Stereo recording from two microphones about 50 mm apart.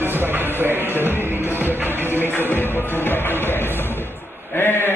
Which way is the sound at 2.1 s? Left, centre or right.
Left.